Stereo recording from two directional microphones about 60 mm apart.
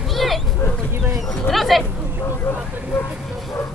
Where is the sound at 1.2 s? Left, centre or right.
Centre.